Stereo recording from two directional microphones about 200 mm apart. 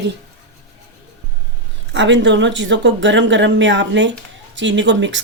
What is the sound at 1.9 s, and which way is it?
Speech, 65° right (ahead or behind).